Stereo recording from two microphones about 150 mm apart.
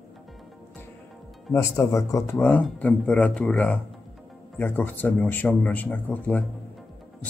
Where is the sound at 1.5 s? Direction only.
20° left (ahead or behind).